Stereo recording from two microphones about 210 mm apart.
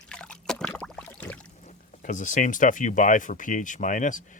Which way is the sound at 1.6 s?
35° left (ahead or behind).